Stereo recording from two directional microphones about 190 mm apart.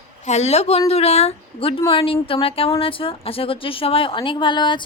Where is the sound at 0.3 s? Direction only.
35° left (ahead or behind).